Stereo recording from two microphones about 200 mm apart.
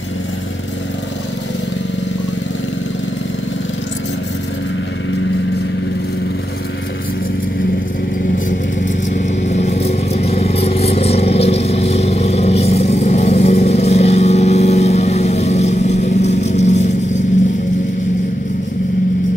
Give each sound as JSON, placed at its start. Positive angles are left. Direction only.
{"t": 8.5, "sound": "vehicle", "side_deg": 40}